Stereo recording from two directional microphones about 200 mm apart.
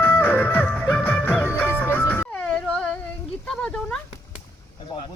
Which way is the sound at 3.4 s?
5° left (ahead or behind).